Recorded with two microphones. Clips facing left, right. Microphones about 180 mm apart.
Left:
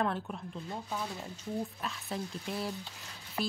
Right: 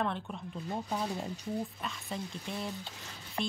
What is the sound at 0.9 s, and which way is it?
Speech, 20° right (ahead or behind).